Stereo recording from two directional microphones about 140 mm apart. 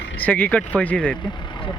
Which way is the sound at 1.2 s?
35° left (ahead or behind).